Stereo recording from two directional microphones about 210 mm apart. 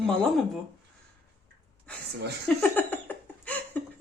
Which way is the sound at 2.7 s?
10° left (ahead or behind).